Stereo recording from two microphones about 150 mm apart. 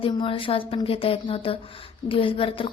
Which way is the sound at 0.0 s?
35° left (ahead or behind).